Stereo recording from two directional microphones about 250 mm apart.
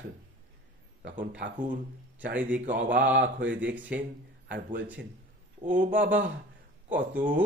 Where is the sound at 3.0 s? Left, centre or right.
Right.